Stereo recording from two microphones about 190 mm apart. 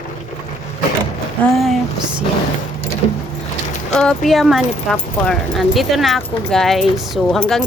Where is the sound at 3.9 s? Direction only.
Centre (ahead or behind).